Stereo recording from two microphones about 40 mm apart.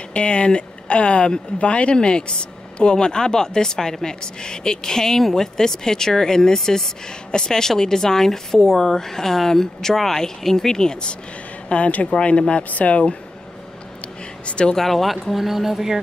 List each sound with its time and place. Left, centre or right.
0.1 s a woman's voice: left
11.7 s speech: left
14.4 s speech: left
14.8 s speech: centre
15.3 s speech: centre